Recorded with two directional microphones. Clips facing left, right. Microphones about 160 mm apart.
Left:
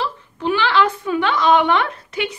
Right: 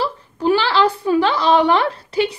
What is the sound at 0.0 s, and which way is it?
A woman's voice, 35° right (ahead or behind).